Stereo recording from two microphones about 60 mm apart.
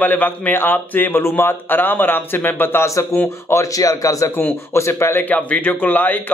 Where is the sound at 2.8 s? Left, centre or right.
Left.